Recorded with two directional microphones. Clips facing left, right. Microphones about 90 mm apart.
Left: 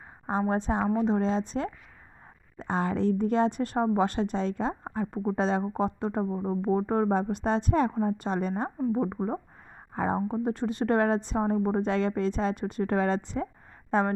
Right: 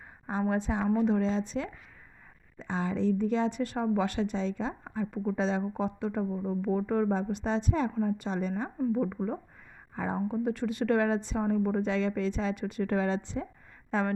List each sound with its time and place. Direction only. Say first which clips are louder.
0.3 s a woman's voice: left 3 dB; 35° left (ahead or behind)
1.2 s a woman's voice: left 2 dB; 40° left (ahead or behind)
2.6 s a woman's voice: left 3 dB; 55° left (ahead or behind)
8.9 s a woman's voice: left 2 dB; 35° left (ahead or behind)
9.9 s speech: left 5 dB; 45° left (ahead or behind)
10.2 s a woman's voice: left 1 dB; 35° left (ahead or behind)